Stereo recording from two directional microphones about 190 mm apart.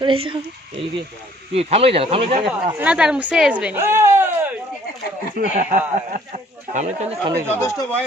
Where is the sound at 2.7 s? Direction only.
5° right (ahead or behind).